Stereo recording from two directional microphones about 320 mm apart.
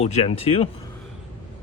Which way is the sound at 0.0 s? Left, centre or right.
Centre.